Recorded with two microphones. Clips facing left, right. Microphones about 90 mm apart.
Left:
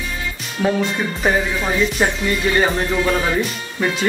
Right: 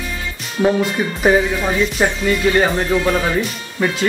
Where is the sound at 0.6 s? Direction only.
20° right (ahead or behind).